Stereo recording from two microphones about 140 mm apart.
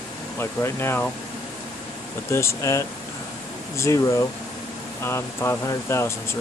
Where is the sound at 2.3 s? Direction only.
20° left (ahead or behind).